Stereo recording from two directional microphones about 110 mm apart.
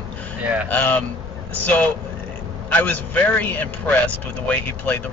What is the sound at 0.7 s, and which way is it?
A man's voice, 15° left (ahead or behind).